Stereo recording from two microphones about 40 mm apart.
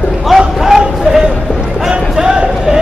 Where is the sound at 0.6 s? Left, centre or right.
Centre.